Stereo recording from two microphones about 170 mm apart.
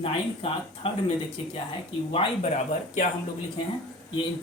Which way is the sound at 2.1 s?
35° left (ahead or behind).